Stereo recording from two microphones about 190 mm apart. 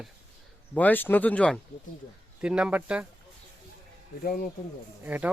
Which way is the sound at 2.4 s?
5° right (ahead or behind).